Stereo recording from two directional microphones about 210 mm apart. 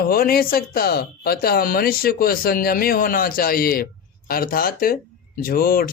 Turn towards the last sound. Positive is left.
turn(degrees=45)  # may be behind; listen again after turning